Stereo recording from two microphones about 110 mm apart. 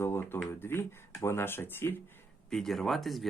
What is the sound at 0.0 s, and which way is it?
Speech, 20° left (ahead or behind).